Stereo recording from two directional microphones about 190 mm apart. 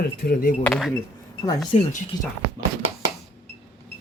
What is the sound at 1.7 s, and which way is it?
Speech, 35° left (ahead or behind).